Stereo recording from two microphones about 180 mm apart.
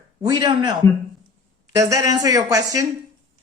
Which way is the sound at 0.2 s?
20° right (ahead or behind).